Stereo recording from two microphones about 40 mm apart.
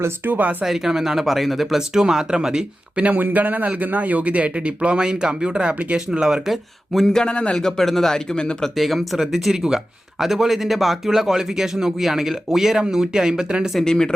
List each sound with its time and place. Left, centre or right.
0.3 s speech: right
0.6 s a man's voice: centre
1.9 s a man's voice: centre
2.9 s a man's voice: right; by 6.6 s centre
7.1 s a man's voice: centre; by 13.7 s right
13.8 s speech: centre